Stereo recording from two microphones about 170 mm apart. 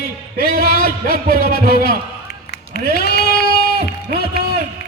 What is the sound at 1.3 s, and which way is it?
Speech, 60° right (ahead or behind).